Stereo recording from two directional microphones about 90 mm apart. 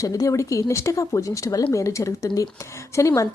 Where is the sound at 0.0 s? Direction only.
40° left (ahead or behind).